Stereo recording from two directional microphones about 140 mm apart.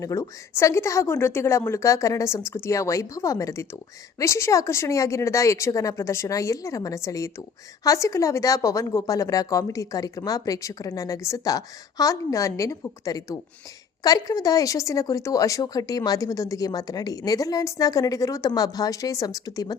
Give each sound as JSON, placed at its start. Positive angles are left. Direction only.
{"t": 0.0, "sound": "speech", "side_deg": 20}